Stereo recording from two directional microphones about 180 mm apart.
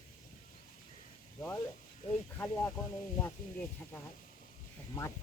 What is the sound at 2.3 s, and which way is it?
Speech, 10° left (ahead or behind).